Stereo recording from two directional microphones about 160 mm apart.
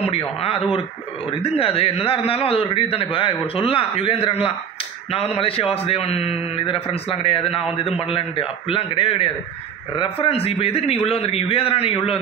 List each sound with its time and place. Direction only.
1.4 s a man's voice: 35° left (ahead or behind)